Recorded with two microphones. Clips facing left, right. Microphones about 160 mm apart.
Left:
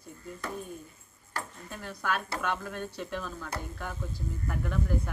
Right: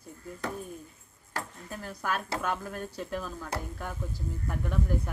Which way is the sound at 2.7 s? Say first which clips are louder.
Right 1 dB; 35° right (ahead or behind).